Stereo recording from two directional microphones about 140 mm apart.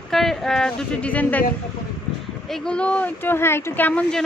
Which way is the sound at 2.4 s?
5° left (ahead or behind).